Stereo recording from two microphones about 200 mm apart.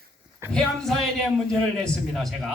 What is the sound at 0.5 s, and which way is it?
A man's voice, centre (ahead or behind).